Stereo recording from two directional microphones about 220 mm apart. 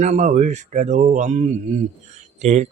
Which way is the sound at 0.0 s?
30° right (ahead or behind).